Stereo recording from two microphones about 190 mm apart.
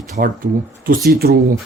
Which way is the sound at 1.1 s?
55° right (ahead or behind).